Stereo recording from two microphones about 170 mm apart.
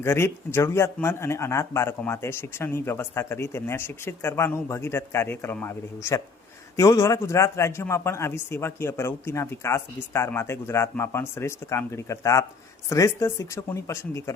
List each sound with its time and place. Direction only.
0.0 s speech: 15° left (ahead or behind)